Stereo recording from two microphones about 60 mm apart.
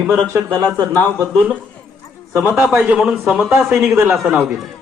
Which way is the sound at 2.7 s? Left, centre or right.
Right.